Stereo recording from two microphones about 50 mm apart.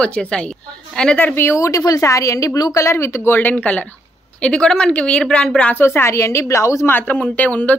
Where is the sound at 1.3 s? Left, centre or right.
Left.